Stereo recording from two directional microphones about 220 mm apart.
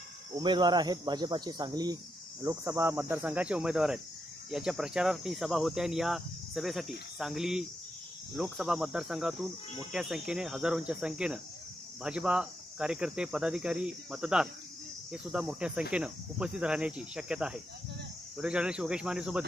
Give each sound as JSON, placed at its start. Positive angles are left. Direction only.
{"t": 0.4, "sound": "speech", "side_deg": -20}